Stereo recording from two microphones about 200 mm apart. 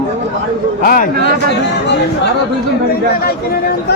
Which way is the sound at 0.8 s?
45° left (ahead or behind).